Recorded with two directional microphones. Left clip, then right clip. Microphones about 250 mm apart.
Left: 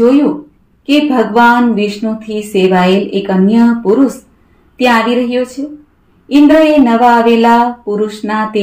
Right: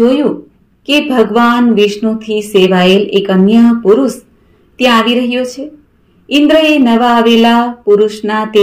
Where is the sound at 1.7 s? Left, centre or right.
Right.